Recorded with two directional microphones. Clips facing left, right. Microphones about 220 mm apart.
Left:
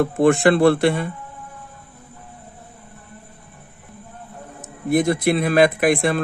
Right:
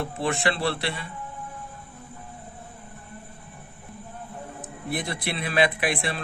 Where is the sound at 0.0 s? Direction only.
45° left (ahead or behind).